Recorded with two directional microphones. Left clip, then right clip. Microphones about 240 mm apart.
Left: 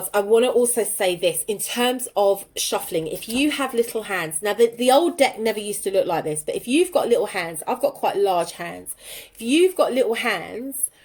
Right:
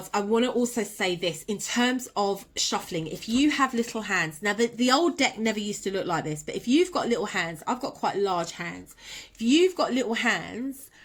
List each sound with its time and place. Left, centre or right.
0.2 s a woman's voice: centre